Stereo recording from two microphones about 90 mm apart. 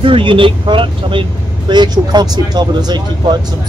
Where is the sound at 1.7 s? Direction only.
55° right (ahead or behind).